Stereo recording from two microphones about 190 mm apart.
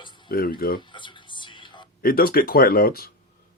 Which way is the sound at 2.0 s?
50° left (ahead or behind).